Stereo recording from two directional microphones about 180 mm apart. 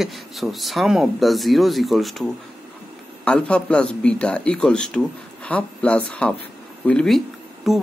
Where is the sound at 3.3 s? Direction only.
5° left (ahead or behind).